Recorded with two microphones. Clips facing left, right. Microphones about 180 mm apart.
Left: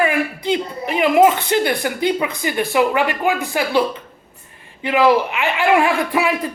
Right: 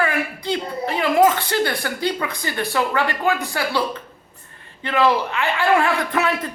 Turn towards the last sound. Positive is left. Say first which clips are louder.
# left 3 dB
turn(degrees=10)  # may be behind; listen again after turning